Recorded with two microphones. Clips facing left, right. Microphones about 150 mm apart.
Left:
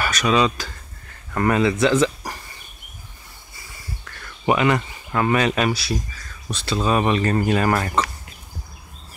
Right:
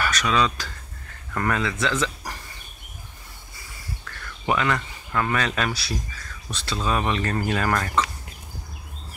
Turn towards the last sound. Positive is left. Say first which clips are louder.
# left 4 dB
turn(degrees=10)  # may be behind; listen again after turning